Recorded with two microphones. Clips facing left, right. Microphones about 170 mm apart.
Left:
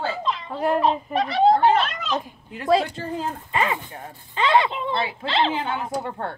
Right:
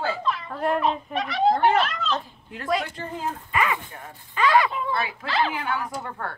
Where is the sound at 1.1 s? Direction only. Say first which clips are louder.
Left 5 dB; 30° left (ahead or behind).